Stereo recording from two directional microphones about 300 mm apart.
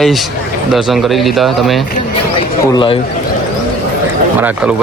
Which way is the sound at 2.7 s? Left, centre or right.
Centre.